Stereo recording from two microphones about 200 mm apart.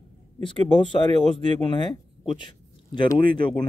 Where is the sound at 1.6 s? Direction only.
25° left (ahead or behind).